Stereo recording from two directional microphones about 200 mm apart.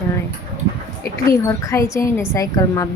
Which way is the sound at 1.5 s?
15° left (ahead or behind).